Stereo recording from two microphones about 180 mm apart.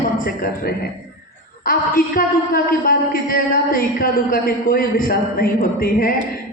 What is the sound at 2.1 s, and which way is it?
Speech, 50° left (ahead or behind).